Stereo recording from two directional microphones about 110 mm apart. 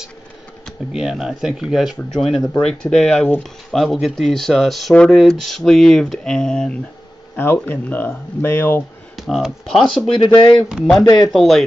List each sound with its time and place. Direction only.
0.7 s speech: 5° right (ahead or behind)
7.3 s speech: 20° left (ahead or behind)
9.1 s speech: centre (ahead or behind)
10.0 s speech: 50° left (ahead or behind)
11.3 s speech: centre (ahead or behind)